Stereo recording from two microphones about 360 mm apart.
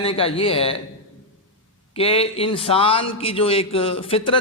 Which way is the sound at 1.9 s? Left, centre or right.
Centre.